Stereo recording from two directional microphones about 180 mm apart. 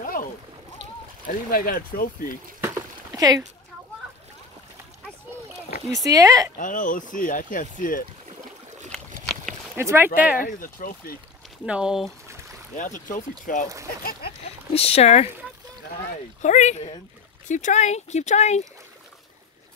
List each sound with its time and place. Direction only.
0.0 s splash: 50° left (ahead or behind)
1.2 s speech: 50° left (ahead or behind)
2.6 s a sound: 15° right (ahead or behind)
5.9 s speech: 20° right (ahead or behind)
6.6 s speech: 45° left (ahead or behind)
9.2 s a sound: centre (ahead or behind)
9.8 s speech: 10° right (ahead or behind)
10.3 s speech: 50° left (ahead or behind)
11.6 s speech: 5° right (ahead or behind)
12.7 s speech: 45° left (ahead or behind)
14.7 s speech: 35° left (ahead or behind)
16.3 s speech: 40° left (ahead or behind)